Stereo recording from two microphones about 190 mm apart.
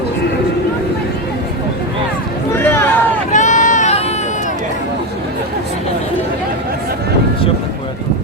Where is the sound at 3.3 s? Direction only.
40° left (ahead or behind).